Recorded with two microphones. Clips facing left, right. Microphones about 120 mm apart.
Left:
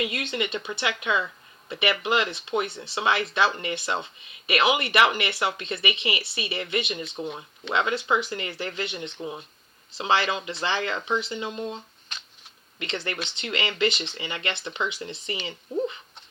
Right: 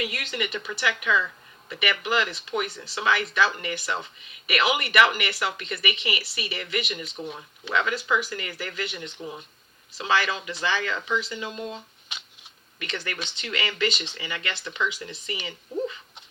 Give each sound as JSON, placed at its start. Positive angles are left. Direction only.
{"t": 0.0, "sound": "speech", "side_deg": 25}
{"t": 12.1, "sound": "shuffling cards", "side_deg": -10}
{"t": 12.8, "sound": "speech", "side_deg": 25}